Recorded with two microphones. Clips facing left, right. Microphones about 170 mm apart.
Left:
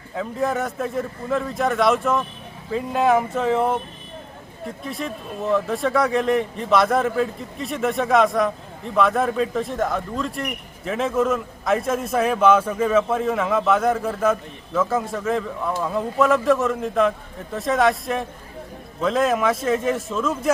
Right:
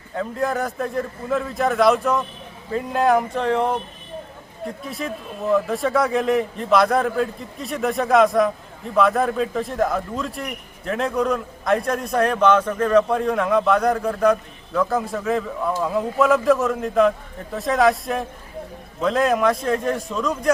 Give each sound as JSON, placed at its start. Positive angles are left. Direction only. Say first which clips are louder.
{"t": 0.1, "sound": "a man's voice", "louder": "even", "side_deg": 0}